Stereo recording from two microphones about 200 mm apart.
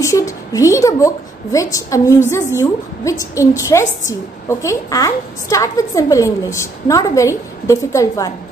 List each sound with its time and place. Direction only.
0.0 s a woman's voice: 15° left (ahead or behind)